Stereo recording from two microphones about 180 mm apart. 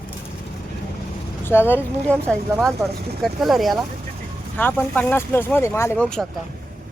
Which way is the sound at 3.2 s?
Centre (ahead or behind).